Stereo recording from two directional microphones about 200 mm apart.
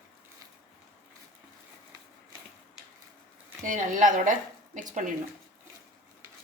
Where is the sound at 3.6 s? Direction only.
40° right (ahead or behind).